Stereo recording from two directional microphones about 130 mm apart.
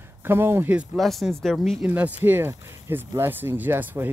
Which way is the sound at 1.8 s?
10° right (ahead or behind).